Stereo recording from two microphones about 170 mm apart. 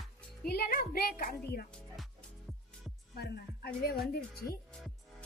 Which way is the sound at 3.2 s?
65° left (ahead or behind).